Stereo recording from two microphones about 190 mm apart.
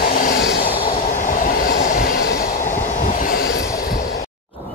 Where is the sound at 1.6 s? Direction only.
45° left (ahead or behind).